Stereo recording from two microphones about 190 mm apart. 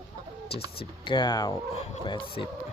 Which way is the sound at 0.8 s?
25° left (ahead or behind).